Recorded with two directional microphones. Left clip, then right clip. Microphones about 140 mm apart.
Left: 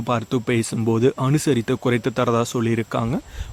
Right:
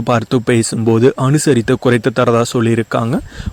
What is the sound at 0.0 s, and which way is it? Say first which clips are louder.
Speech: right 8 dB; 40° right (ahead or behind).